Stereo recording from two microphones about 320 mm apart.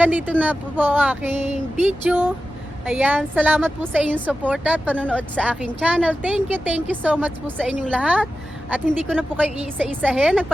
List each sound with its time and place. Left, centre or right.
0.0 s a woman's voice: centre
1.5 s a sound: right
2.0 s a woman's voice: centre